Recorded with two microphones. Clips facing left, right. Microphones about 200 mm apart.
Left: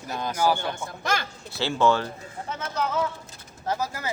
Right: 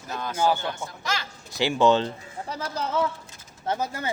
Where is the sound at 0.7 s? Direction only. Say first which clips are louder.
Left 3 dB; 50° left (ahead or behind).